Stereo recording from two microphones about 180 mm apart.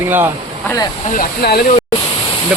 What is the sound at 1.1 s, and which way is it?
Speech, 55° left (ahead or behind).